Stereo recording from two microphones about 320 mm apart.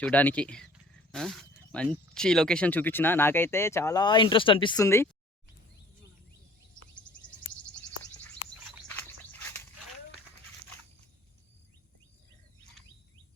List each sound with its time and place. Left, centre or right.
0.0 s speech: centre